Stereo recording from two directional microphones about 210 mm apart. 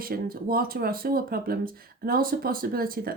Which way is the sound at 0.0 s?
45° right (ahead or behind).